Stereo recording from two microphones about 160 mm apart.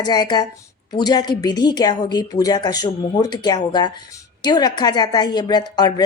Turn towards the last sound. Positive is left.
turn(degrees=25)  # may be behind; listen again after turning